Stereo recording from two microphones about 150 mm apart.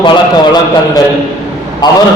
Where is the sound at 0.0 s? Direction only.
30° left (ahead or behind).